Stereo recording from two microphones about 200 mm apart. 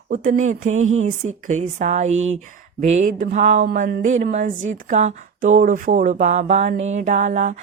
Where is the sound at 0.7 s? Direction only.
90° right.